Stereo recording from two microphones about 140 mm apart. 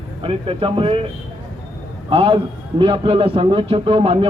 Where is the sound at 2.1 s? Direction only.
40° right (ahead or behind).